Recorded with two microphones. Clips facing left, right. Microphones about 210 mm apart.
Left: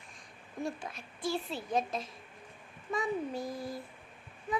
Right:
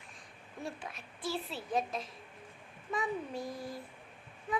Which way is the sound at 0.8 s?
5° right (ahead or behind).